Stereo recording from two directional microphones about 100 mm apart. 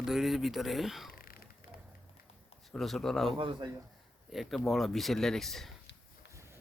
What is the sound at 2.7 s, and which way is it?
Speech, 5° left (ahead or behind).